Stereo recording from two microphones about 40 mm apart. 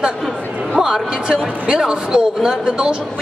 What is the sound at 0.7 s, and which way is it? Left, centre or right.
Speech, centre.